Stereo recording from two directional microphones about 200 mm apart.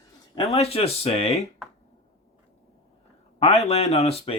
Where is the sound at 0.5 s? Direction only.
30° left (ahead or behind).